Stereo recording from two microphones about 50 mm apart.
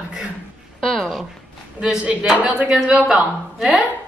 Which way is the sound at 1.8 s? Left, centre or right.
Centre.